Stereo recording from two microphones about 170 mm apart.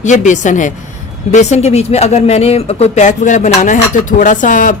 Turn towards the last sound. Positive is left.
turn(degrees=50)  # may be behind; listen again after turning